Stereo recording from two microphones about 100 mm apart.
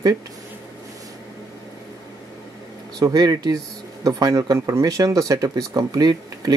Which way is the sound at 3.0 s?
35° right (ahead or behind).